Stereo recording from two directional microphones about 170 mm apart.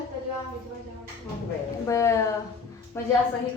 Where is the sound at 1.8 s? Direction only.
15° left (ahead or behind).